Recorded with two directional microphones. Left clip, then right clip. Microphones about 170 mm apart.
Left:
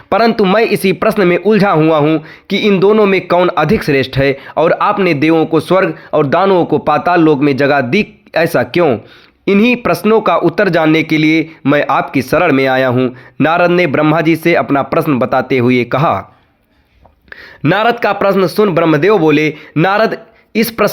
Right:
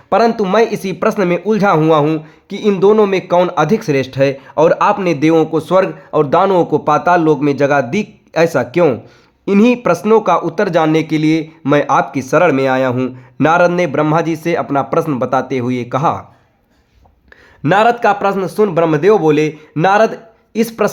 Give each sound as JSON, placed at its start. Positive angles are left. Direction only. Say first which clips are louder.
{"t": 0.1, "sound": "speech", "louder": "left 2 dB", "side_deg": 25}
{"t": 17.6, "sound": "speech", "louder": "right 1 dB", "side_deg": 20}